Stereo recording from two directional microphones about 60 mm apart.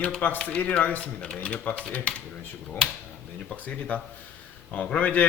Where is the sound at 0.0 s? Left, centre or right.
Left.